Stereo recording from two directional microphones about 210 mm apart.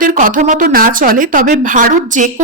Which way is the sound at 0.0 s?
40° right (ahead or behind).